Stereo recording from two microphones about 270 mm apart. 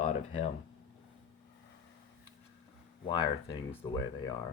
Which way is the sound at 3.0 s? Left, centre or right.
Centre.